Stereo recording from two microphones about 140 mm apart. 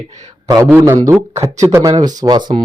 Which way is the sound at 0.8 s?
20° right (ahead or behind).